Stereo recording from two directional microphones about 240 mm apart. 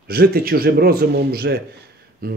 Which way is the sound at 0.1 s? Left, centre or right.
Right.